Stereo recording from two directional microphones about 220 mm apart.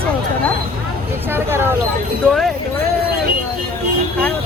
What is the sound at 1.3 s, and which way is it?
Speech, 10° right (ahead or behind).